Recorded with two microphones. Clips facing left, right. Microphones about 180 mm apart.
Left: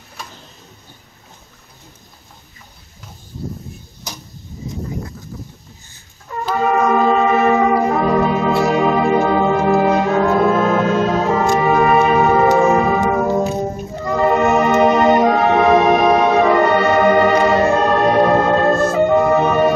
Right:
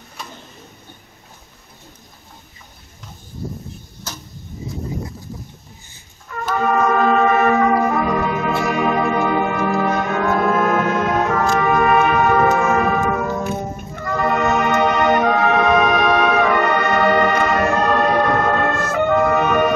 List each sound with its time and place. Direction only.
6.6 s music: 20° left (ahead or behind)